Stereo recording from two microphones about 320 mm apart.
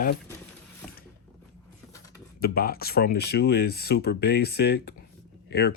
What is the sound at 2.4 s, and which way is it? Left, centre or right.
Speech, left.